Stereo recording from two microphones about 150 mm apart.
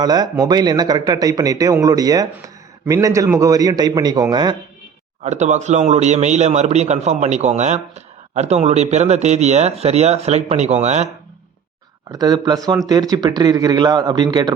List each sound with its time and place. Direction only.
0.0 s speech: 25° right (ahead or behind)
5.2 s speech: 50° right (ahead or behind)
12.1 s speech: 25° right (ahead or behind)